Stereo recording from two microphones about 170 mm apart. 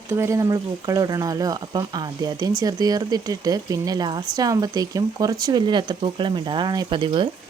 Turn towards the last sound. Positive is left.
turn(degrees=-30)  # may be behind; listen again after turning